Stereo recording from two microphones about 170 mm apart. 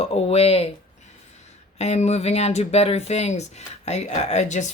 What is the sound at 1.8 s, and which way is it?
Speech, 40° left (ahead or behind).